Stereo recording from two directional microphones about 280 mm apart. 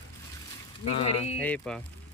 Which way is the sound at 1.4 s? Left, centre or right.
Centre.